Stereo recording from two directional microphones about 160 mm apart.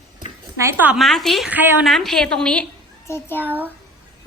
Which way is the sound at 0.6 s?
10° right (ahead or behind).